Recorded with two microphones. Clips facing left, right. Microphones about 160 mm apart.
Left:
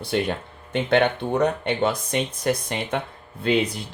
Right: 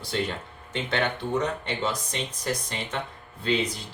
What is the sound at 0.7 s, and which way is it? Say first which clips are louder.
Speech: left 8 dB; 60° left (ahead or behind).